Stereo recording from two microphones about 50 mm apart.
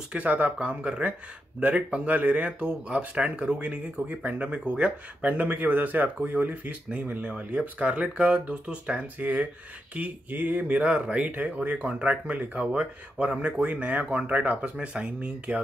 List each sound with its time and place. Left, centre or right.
0.1 s speech: right
5.3 s speech: right